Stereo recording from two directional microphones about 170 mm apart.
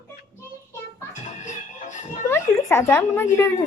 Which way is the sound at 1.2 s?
45° left (ahead or behind).